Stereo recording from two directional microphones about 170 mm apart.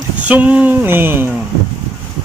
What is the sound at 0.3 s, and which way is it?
Speech, 10° right (ahead or behind).